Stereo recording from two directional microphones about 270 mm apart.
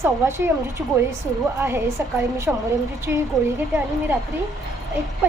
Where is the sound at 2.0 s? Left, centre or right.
Centre.